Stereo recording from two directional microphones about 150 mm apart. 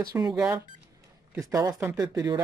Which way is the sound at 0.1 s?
25° right (ahead or behind).